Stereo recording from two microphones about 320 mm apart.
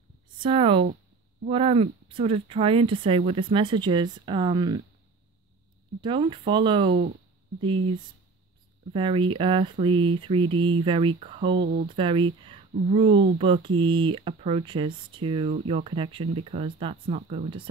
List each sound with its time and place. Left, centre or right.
0.4 s speech: centre
5.9 s speech: centre